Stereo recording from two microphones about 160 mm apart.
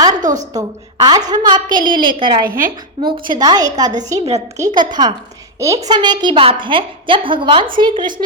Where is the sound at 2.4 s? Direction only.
60° right (ahead or behind).